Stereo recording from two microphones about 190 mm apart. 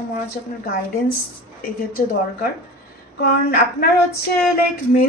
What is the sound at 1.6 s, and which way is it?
Speech, 50° left (ahead or behind).